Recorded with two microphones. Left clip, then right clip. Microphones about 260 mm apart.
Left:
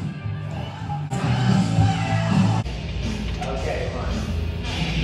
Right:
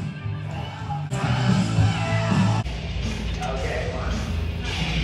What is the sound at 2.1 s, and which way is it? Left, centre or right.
Music, right.